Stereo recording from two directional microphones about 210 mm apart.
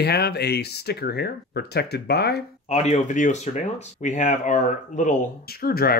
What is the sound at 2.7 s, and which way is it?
Speech, 30° left (ahead or behind).